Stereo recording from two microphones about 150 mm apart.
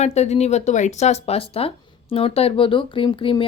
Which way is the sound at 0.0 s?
50° left (ahead or behind).